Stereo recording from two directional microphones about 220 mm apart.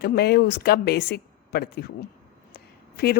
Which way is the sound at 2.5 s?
45° left (ahead or behind).